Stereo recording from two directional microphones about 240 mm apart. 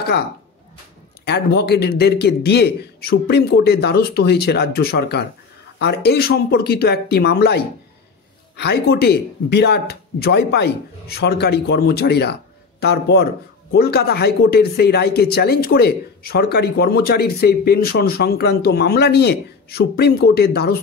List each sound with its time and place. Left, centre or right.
1.2 s a man's voice: left